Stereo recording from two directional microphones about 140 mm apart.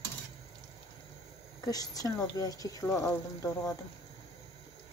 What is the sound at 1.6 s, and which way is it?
Speech, 25° left (ahead or behind).